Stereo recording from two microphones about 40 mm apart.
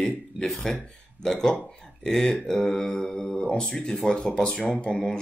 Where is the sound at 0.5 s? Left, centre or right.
Centre.